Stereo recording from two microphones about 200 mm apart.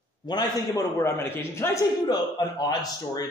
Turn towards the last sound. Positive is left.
turn(degrees=20)  # may be behind; listen again after turning